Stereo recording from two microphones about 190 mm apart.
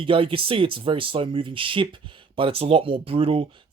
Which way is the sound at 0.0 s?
30° right (ahead or behind).